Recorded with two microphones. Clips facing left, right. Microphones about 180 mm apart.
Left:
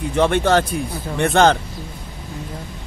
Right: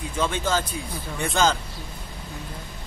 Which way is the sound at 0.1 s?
65° left (ahead or behind).